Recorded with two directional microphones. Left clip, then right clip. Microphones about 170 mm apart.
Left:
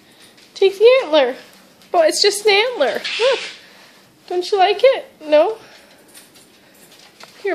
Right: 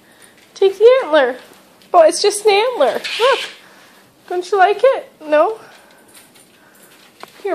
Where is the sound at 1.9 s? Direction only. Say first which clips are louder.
Right 3 dB; 10° right (ahead or behind).